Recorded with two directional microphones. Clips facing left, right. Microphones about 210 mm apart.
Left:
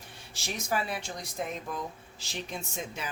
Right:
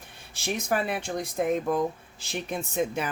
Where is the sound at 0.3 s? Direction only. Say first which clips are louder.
Right 5 dB; 55° right (ahead or behind).